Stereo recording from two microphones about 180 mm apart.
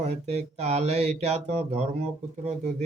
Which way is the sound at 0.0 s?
40° right (ahead or behind).